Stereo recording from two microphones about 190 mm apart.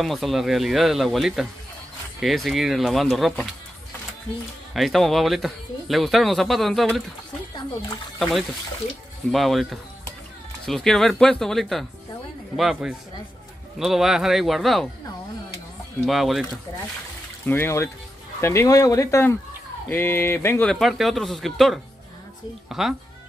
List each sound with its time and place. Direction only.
0.0 s speech: centre (ahead or behind)
4.7 s speech: centre (ahead or behind)
8.2 s speech: centre (ahead or behind)
16.1 s speech: centre (ahead or behind)
17.5 s speech: 15° left (ahead or behind)